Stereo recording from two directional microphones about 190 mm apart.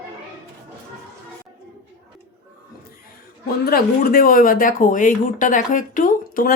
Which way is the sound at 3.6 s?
50° left (ahead or behind).